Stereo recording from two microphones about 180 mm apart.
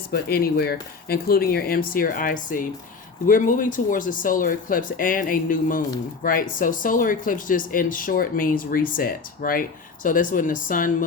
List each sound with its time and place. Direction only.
0.1 s speech: 55° left (ahead or behind)